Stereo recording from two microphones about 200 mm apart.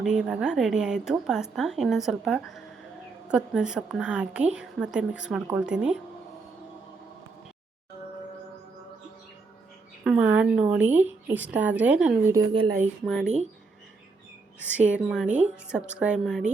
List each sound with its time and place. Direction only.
0.0 s a woman's voice: 5° right (ahead or behind)
10.0 s a woman's voice: 5° right (ahead or behind)
12.3 s a woman's voice: 20° right (ahead or behind)
14.7 s a woman's voice: 5° right (ahead or behind)